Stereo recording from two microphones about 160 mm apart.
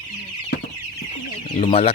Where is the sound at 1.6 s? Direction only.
35° left (ahead or behind).